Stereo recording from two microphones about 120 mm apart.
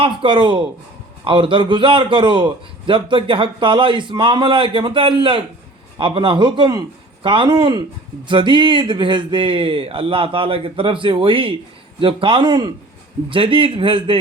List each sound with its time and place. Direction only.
0.0 s a man's voice: 45° right (ahead or behind)
13.3 s speech: 45° right (ahead or behind)